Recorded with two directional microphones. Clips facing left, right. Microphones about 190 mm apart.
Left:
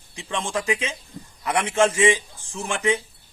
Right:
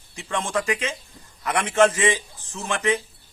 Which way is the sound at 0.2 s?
15° left (ahead or behind).